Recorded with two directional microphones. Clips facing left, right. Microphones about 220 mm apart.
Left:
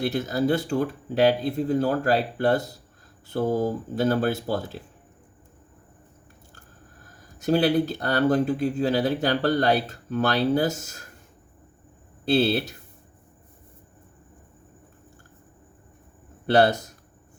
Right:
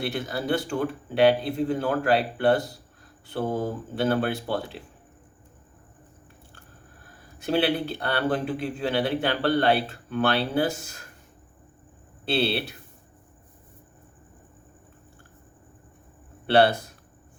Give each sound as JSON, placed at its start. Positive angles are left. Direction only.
{"t": 0.0, "sound": "speech", "side_deg": 40}
{"t": 7.0, "sound": "speech", "side_deg": 40}
{"t": 12.2, "sound": "speech", "side_deg": 40}
{"t": 16.5, "sound": "speech", "side_deg": 40}